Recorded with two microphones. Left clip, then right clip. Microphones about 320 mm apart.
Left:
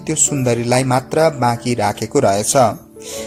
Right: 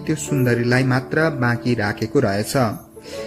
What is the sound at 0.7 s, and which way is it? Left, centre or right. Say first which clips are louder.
A man's voice: left 4 dB; left.